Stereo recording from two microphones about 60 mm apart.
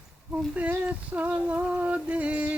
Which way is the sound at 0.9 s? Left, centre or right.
Right.